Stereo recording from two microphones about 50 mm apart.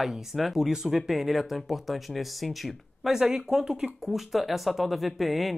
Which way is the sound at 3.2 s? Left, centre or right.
Centre.